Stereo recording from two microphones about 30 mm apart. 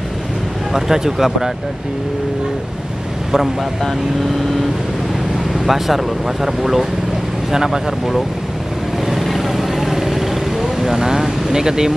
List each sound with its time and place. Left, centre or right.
0.7 s speech: centre
5.5 s speech: centre
9.2 s vehicle: centre